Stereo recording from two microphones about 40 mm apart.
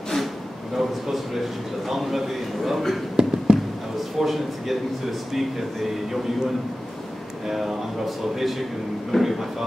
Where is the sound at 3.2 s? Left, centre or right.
Right.